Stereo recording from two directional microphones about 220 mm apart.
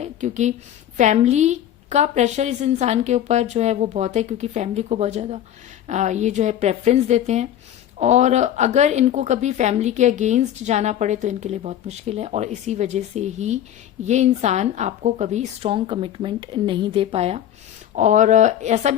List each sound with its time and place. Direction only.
0.0 s a woman's voice: 35° right (ahead or behind)